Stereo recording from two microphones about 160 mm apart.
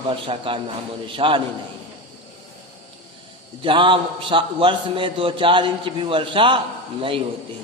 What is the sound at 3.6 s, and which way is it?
A man's voice, 30° right (ahead or behind).